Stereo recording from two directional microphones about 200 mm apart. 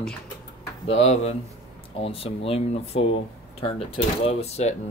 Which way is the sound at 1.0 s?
30° left (ahead or behind).